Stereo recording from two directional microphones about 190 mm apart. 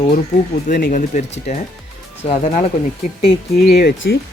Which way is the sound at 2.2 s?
35° left (ahead or behind).